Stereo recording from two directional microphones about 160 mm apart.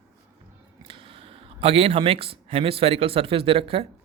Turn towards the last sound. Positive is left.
turn(degrees=-35)  # may be behind; listen again after turning